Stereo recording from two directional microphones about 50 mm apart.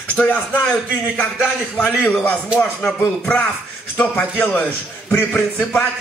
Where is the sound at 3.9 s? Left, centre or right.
Left.